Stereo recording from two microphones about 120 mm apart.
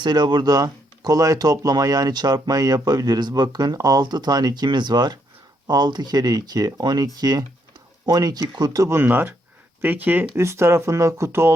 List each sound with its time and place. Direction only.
0.0 s speech: 35° right (ahead or behind); by 11.5 s 20° right (ahead or behind)